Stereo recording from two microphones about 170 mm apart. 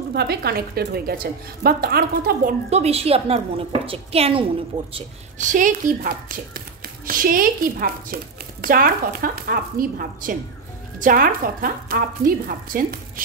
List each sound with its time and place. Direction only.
0.1 s a woman's voice: 70° right (ahead or behind)
2.7 s a woman's voice: 35° right (ahead or behind)
5.4 s a woman's voice: 50° right (ahead or behind)